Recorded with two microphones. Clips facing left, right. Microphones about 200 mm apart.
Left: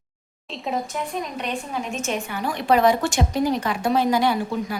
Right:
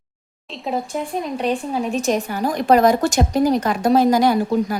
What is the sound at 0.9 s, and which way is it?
A woman's voice, 30° right (ahead or behind).